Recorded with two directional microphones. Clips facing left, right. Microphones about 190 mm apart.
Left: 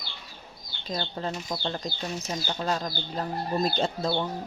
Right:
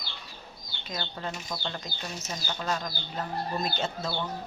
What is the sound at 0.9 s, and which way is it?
Speech, 30° left (ahead or behind).